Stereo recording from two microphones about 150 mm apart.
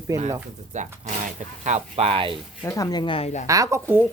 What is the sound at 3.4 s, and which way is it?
Speech, 20° right (ahead or behind).